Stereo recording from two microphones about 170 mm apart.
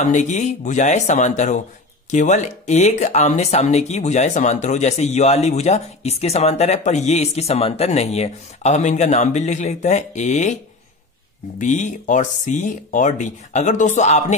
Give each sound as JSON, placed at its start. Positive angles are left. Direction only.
{"t": 0.0, "sound": "speech", "side_deg": 45}